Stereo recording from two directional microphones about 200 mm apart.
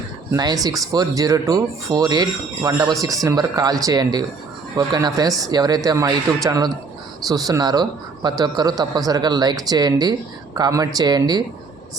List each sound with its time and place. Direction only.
0.3 s speech: 20° right (ahead or behind)